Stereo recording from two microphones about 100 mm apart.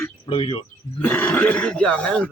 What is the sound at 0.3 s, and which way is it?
Speech, 65° left (ahead or behind).